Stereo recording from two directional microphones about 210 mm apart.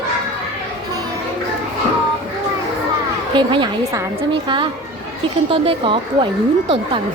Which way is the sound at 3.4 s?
20° right (ahead or behind).